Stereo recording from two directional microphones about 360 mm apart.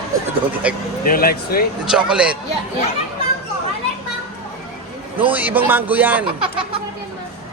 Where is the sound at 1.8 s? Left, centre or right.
Centre.